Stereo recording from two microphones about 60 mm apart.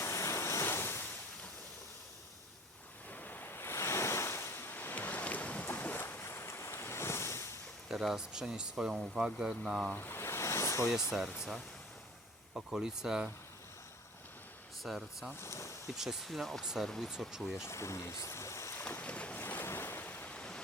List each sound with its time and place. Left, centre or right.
0.0 s waves: left
3.1 s waves: left
5.6 s ocean: left
7.9 s speech: centre
10.0 s ocean: left
12.5 s speech: centre
14.8 s speech: centre
15.4 s speech: left
16.0 s speech: centre
17.1 s speech: centre
17.6 s speech: left
18.8 s boat: left
19.0 s boat: left
19.4 s waves: left; by 20.6 s centre